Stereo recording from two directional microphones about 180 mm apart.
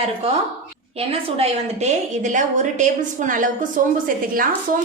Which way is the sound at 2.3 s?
45° right (ahead or behind).